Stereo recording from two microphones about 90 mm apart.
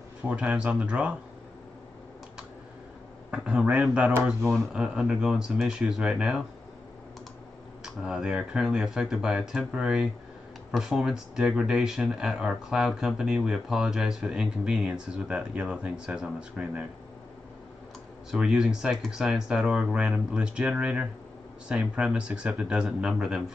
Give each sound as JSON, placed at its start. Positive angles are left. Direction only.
{"t": 0.3, "sound": "speech", "side_deg": -15}
{"t": 3.3, "sound": "speech", "side_deg": -15}
{"t": 7.8, "sound": "speech", "side_deg": -10}
{"t": 18.3, "sound": "speech", "side_deg": -10}